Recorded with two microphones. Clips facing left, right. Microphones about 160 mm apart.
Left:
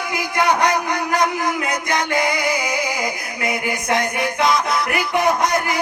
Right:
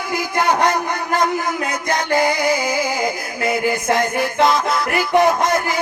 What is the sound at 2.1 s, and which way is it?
Music, 25° right (ahead or behind).